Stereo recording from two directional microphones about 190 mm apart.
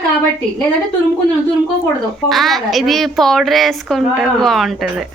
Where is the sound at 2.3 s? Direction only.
Centre (ahead or behind).